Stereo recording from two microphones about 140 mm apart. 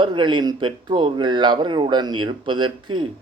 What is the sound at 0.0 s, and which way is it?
A man's voice, 35° right (ahead or behind).